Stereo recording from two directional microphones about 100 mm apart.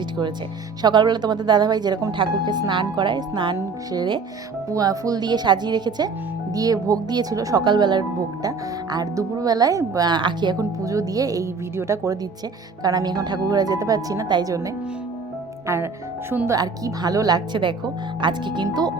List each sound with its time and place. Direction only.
0.8 s speech: 45° right (ahead or behind)
2.1 s speech: 50° right (ahead or behind)
4.7 s speech: 40° right (ahead or behind)
7.6 s speech: 50° right (ahead or behind)
10.6 s speech: 35° right (ahead or behind)
15.6 s speech: 25° right (ahead or behind)
16.5 s speech: 35° right (ahead or behind)